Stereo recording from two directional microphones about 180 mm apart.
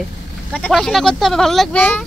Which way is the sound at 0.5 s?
5° left (ahead or behind).